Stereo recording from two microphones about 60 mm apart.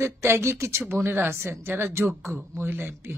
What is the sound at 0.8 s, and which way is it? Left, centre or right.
Speech, right.